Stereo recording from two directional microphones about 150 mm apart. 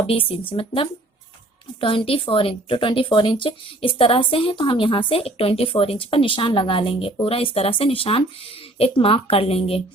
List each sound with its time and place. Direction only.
0.1 s a woman's voice: 40° left (ahead or behind)